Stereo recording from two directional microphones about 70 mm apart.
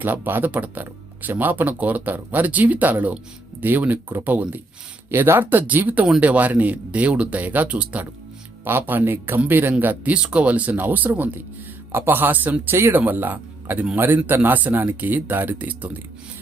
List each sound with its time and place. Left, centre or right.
0.0 s speech: right
8.6 s a man's voice: right